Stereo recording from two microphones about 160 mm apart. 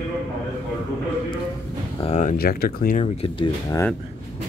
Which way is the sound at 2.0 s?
45° left (ahead or behind).